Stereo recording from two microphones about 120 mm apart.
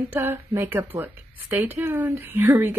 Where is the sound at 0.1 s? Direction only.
15° right (ahead or behind).